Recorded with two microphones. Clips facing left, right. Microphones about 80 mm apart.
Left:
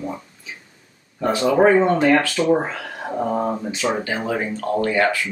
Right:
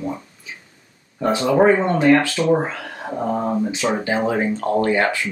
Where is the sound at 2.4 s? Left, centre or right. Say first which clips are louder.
Even; centre.